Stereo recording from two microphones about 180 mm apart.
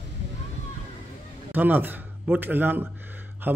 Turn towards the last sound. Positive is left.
turn(degrees=-10)  # may be behind; listen again after turning